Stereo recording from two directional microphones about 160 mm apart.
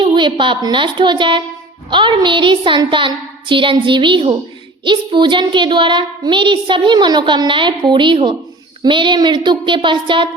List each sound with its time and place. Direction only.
0.0 s a child's voice: 30° right (ahead or behind)